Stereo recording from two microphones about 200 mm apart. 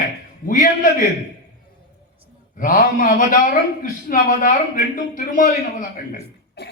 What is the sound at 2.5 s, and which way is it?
A man's voice, 45° left (ahead or behind).